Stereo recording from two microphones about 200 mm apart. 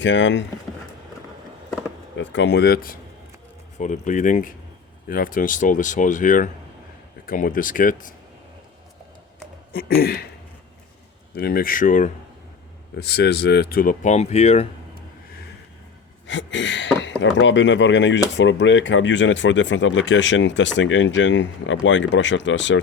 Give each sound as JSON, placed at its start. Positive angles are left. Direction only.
{"t": 0.0, "sound": "speech", "side_deg": 65}
{"t": 2.1, "sound": "speech", "side_deg": 65}
{"t": 9.7, "sound": "speech", "side_deg": 50}
{"t": 11.3, "sound": "speech", "side_deg": 50}
{"t": 13.0, "sound": "speech", "side_deg": 55}
{"t": 16.2, "sound": "speech", "side_deg": 65}